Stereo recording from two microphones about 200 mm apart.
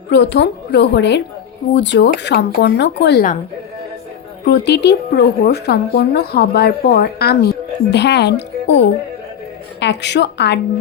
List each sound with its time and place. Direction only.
0.1 s speech: 60° left (ahead or behind)
4.4 s a woman's voice: 60° left (ahead or behind)